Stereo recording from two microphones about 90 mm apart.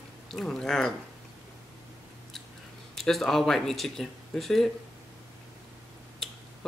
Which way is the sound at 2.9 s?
5° left (ahead or behind).